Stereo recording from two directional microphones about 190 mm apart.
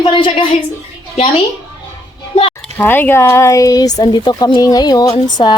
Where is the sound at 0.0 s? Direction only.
25° left (ahead or behind).